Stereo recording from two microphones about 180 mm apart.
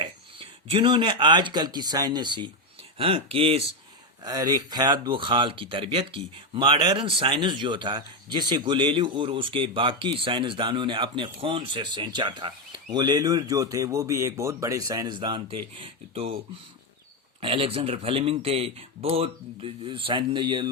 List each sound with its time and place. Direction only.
0.0 s speech: 30° right (ahead or behind)
17.4 s speech: 30° right (ahead or behind)